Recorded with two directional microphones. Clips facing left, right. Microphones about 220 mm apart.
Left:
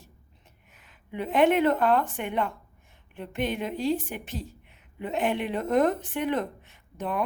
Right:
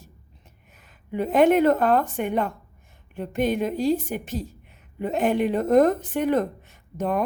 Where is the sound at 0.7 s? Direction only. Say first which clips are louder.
Right 7 dB; 45° right (ahead or behind).